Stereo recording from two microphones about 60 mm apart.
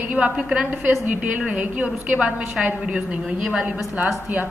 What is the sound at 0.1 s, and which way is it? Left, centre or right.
A woman's voice, centre.